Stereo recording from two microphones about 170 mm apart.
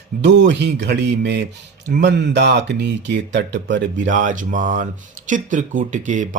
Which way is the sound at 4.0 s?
50° right (ahead or behind).